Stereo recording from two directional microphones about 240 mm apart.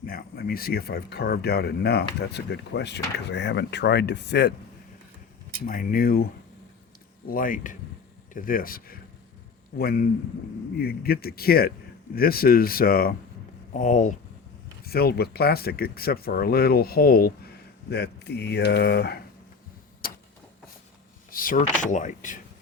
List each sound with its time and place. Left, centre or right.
0.0 s speech: left
5.6 s speech: left
7.3 s speech: left
21.2 s speech: left